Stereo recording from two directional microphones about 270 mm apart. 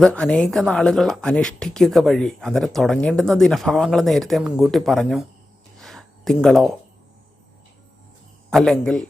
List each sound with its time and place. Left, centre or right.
0.0 s speech: centre
5.7 s a sound: centre
8.4 s speech: centre